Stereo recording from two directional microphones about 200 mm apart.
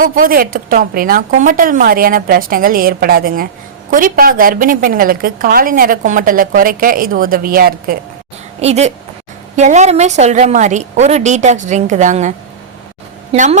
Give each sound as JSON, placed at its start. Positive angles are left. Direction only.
{"t": 0.0, "sound": "a woman's voice", "side_deg": -45}
{"t": 8.6, "sound": "a woman's voice", "side_deg": -35}
{"t": 13.3, "sound": "a woman's voice", "side_deg": -40}